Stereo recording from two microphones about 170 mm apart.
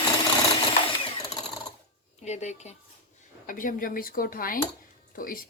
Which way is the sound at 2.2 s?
40° left (ahead or behind).